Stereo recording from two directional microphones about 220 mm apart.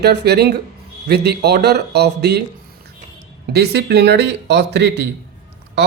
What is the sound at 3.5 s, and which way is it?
Speech, 50° right (ahead or behind).